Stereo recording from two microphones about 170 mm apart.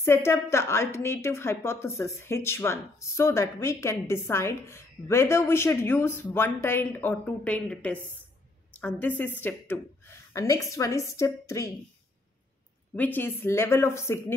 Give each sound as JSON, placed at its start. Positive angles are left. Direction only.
{"t": 0.0, "sound": "a woman's voice", "side_deg": 15}
{"t": 12.9, "sound": "a woman's voice", "side_deg": 10}